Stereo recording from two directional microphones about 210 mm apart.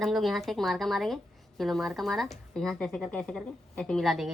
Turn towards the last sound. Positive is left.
turn(degrees=0)  # may be behind; listen again after turning